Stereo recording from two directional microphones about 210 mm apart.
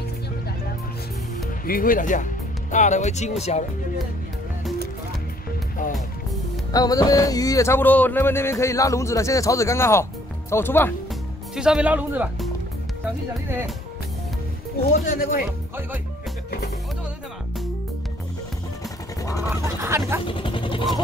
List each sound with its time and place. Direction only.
1.7 s speech: 40° left (ahead or behind)
6.7 s speech: 15° left (ahead or behind)
11.5 s speech: 5° right (ahead or behind)
14.9 s speech: 40° left (ahead or behind)
19.5 s speech: 10° right (ahead or behind)
20.2 s speech: 25° left (ahead or behind)